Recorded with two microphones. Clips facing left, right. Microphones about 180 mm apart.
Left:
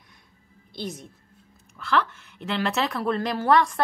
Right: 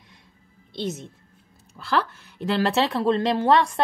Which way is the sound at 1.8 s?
35° right (ahead or behind).